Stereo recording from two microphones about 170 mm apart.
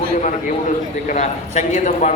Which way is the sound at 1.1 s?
45° left (ahead or behind).